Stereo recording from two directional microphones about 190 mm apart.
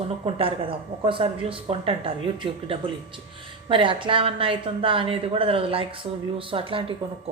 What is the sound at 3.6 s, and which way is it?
Speech, 25° right (ahead or behind).